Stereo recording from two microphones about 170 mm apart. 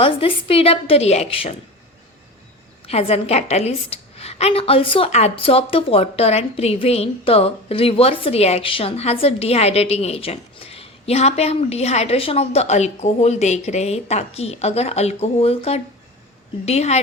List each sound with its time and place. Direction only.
0.0 s a woman's voice: 35° left (ahead or behind)
2.8 s a woman's voice: 35° left (ahead or behind)